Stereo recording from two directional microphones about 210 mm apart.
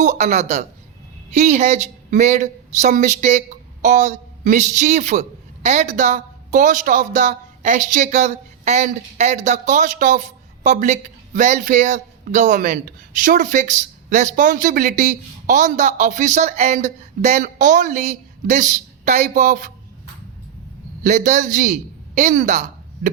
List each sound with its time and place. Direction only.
0.0 s speech: 35° right (ahead or behind)
21.0 s speech: 35° right (ahead or behind)